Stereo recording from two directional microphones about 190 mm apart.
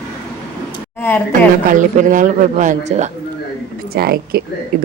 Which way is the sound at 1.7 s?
40° right (ahead or behind).